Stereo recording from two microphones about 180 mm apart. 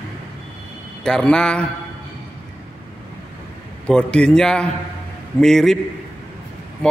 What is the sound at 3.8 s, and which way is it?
A man's voice, 5° left (ahead or behind).